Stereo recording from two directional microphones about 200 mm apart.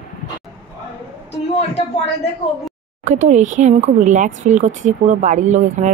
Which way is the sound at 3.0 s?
35° right (ahead or behind).